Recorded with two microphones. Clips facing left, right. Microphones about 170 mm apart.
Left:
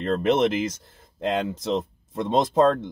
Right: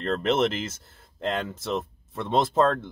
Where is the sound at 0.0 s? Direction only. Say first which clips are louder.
Left 3 dB; 15° left (ahead or behind).